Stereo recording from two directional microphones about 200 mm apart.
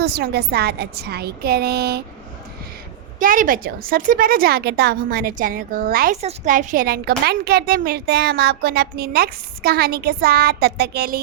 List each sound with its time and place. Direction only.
0.0 s a woman's voice: 50° right (ahead or behind)
3.2 s a woman's voice: 45° right (ahead or behind)